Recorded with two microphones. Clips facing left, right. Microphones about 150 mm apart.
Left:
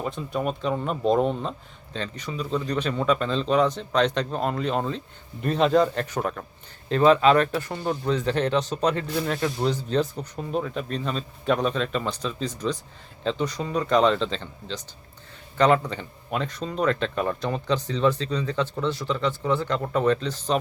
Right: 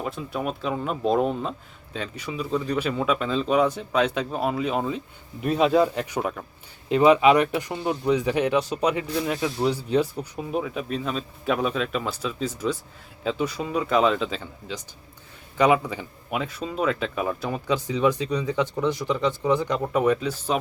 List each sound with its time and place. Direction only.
0.0 s speech: centre (ahead or behind)